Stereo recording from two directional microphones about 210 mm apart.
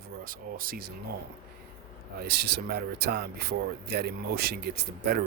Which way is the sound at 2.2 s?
50° right (ahead or behind).